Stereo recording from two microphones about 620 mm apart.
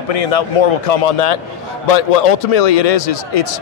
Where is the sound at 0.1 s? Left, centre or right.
Left.